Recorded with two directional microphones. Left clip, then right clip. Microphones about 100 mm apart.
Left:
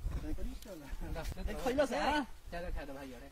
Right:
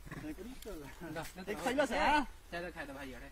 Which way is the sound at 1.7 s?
45° left (ahead or behind).